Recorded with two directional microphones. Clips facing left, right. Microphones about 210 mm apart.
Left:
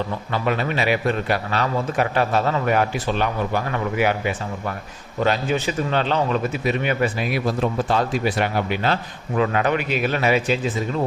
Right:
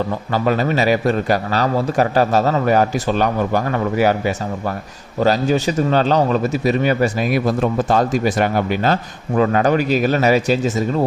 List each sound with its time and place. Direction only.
0.3 s a man's voice: 40° right (ahead or behind)